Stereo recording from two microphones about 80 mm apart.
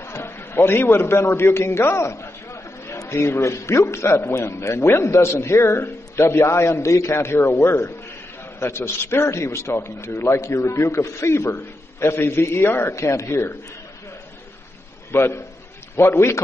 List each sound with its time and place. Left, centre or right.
0.0 s a man's voice: left
15.0 s a man's voice: left